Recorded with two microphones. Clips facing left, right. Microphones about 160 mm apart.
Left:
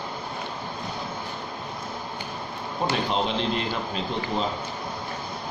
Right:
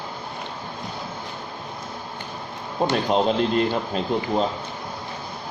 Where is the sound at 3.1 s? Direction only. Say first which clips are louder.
Right 6 dB; 45° right (ahead or behind).